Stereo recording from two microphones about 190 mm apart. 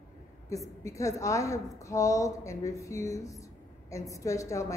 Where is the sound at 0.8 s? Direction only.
15° left (ahead or behind).